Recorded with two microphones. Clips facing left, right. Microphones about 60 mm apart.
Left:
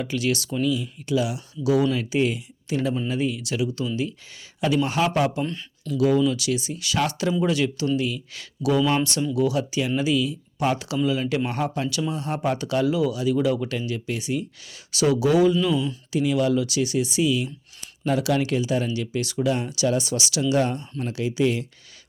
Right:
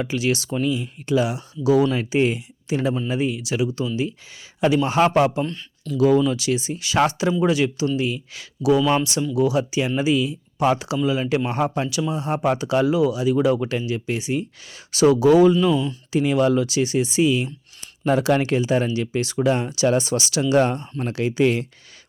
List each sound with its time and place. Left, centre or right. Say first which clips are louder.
0.0 s speech: right 2 dB; right
4.9 s speech: right 8 dB; right
5.5 s speech: even; centre
6.2 s speech: right 2 dB; right
14.9 s speech: right 5 dB; right
15.7 s speech: right 2 dB; centre
16.1 s speech: right 3 dB; right
21.0 s speech: right 3 dB; right